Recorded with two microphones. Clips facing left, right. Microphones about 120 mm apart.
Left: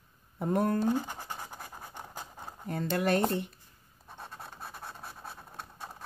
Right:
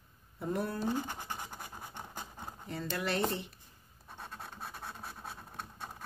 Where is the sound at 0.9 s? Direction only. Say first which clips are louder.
Left 4 dB; 10° left (ahead or behind).